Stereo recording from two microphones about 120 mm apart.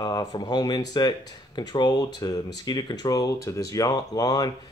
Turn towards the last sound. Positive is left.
turn(degrees=30)  # may be behind; listen again after turning